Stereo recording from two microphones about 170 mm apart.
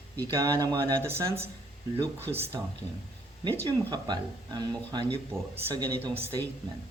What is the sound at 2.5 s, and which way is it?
Speech, 20° right (ahead or behind).